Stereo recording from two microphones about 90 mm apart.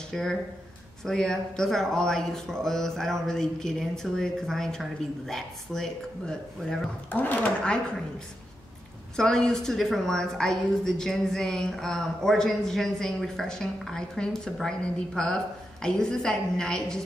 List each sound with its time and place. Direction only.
0.1 s a man's voice: 5° left (ahead or behind)
7.1 s a woman's voice: 20° left (ahead or behind)
9.1 s a woman's voice: 5° left (ahead or behind)